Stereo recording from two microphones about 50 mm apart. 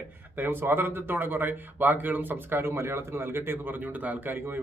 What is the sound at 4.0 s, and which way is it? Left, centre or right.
Speech, right.